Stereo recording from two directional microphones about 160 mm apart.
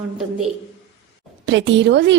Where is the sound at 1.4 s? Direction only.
90° right.